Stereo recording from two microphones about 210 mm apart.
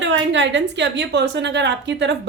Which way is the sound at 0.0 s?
60° right (ahead or behind).